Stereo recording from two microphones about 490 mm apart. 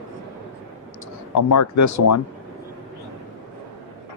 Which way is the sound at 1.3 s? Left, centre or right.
Left.